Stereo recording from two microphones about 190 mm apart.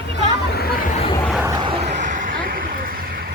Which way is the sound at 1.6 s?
25° right (ahead or behind).